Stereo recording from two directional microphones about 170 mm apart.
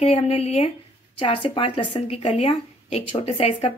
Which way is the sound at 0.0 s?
35° left (ahead or behind).